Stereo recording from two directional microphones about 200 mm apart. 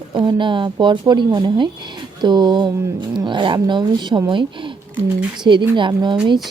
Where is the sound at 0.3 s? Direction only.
25° right (ahead or behind).